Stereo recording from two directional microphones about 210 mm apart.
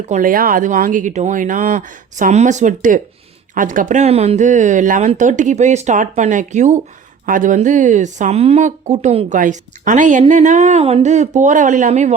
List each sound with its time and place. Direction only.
0.1 s speech: 40° right (ahead or behind)